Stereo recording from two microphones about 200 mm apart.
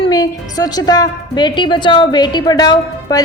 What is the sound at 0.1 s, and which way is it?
A woman's voice, 20° left (ahead or behind).